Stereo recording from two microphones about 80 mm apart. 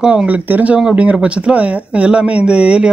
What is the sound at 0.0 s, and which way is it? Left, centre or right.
Speech, centre.